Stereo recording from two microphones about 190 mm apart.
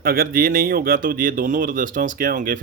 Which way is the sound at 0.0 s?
50° right (ahead or behind).